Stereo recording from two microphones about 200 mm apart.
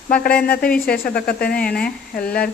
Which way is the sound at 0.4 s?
50° left (ahead or behind).